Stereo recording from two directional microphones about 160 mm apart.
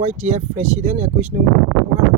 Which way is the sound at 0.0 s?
45° right (ahead or behind).